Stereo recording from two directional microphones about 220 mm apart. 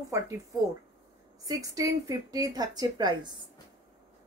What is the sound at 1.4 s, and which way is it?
Speech, 15° right (ahead or behind).